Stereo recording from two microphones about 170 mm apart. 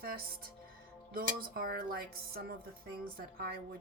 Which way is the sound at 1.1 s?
60° right (ahead or behind).